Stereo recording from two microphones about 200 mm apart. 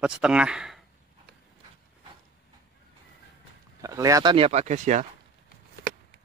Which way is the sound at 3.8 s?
15° right (ahead or behind).